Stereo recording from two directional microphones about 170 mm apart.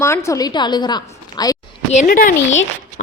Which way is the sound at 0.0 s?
15° left (ahead or behind).